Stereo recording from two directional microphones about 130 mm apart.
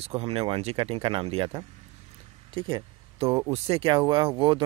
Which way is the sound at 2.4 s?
40° right (ahead or behind).